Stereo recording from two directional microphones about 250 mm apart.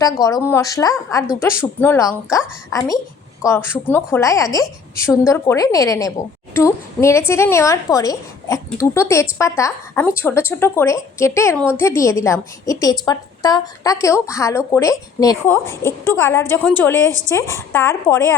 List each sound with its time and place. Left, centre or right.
0.2 s speech: centre